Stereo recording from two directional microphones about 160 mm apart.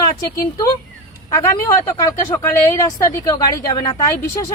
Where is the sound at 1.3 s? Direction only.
20° left (ahead or behind).